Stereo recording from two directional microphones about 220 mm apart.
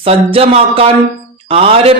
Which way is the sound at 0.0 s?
25° right (ahead or behind).